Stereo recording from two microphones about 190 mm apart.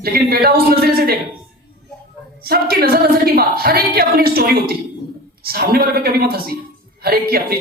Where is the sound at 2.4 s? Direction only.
50° right (ahead or behind).